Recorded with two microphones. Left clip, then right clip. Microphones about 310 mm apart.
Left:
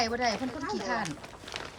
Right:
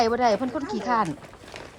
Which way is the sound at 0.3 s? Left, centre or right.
Centre.